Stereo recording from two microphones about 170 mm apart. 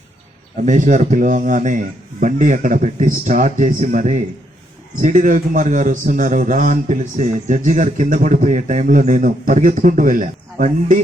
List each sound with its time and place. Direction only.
0.5 s a man's voice: 45° right (ahead or behind)